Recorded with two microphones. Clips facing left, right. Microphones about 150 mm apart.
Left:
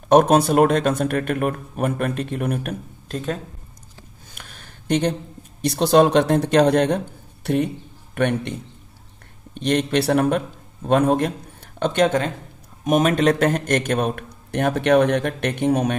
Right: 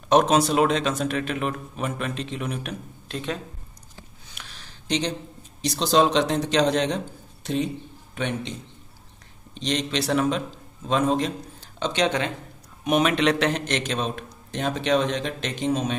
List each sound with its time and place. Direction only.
0.1 s speech: 55° left (ahead or behind)
4.3 s a sound: 50° left (ahead or behind)
5.6 s a man's voice: 55° left (ahead or behind)